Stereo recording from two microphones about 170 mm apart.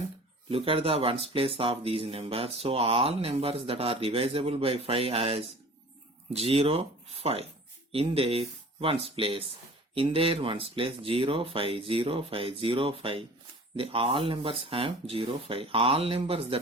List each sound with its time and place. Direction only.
0.5 s speech: 35° right (ahead or behind)